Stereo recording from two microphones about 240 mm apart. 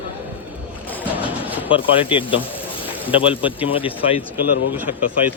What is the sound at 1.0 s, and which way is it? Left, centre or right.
Music, centre.